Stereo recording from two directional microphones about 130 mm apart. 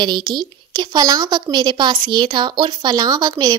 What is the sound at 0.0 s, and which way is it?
A woman's voice, 35° right (ahead or behind).